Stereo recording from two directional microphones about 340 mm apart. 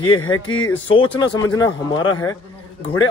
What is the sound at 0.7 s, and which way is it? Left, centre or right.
Speech, centre.